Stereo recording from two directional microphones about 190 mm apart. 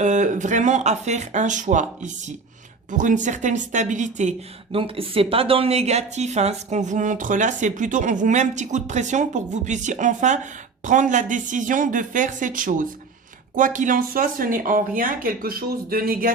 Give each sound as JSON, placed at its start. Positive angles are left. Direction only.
{"t": 0.0, "sound": "speech", "side_deg": -40}